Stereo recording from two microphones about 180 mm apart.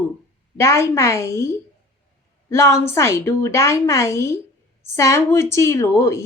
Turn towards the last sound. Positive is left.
turn(degrees=15)  # may be behind; listen again after turning